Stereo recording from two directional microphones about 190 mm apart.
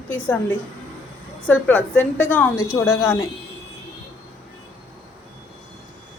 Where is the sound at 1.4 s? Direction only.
5° left (ahead or behind).